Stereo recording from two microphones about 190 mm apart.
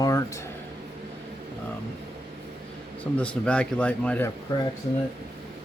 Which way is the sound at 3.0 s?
5° left (ahead or behind).